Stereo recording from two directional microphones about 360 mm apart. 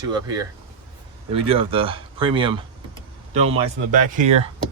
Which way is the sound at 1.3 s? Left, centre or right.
Centre.